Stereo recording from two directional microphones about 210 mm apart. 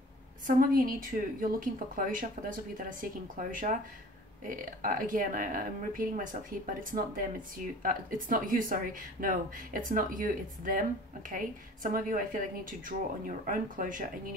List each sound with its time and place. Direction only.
0.5 s a woman's voice: 40° right (ahead or behind)